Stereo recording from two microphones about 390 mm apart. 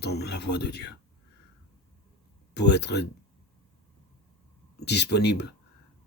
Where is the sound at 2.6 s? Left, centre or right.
Left.